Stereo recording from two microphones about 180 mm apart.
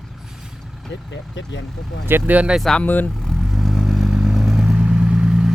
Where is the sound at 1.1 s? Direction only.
85° left.